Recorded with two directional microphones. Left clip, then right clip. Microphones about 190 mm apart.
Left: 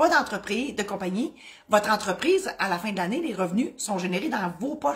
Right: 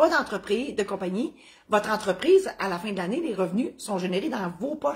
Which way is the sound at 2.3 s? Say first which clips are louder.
Right 3 dB; 20° left (ahead or behind).